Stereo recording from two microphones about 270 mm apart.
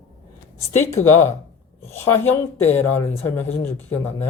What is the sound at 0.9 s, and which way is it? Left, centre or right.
Speech, left.